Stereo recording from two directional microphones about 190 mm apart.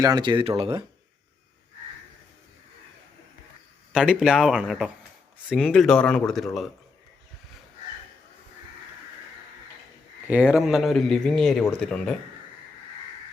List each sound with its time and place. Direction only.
0.0 s speech: 20° right (ahead or behind)
3.9 s a man's voice: centre (ahead or behind)
10.2 s a man's voice: 5° right (ahead or behind)